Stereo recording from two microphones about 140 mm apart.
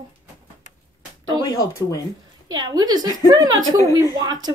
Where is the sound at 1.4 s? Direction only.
25° left (ahead or behind).